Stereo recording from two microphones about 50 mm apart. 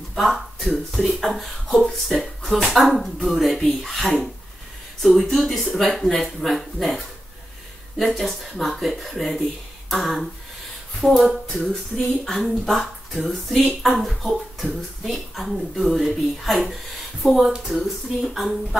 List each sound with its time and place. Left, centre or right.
0.1 s speech: centre
9.8 s a sound: centre
11.0 s speech: centre
17.4 s speech: centre